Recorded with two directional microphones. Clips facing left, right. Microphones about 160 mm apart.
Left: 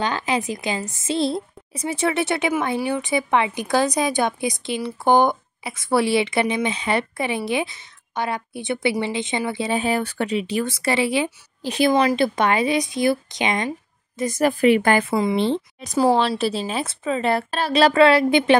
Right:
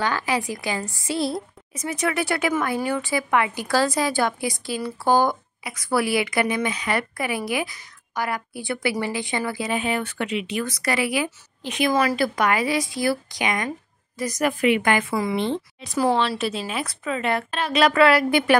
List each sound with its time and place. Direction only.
0.0 s a woman's voice: 20° left (ahead or behind)
11.9 s a woman's voice: 20° left (ahead or behind)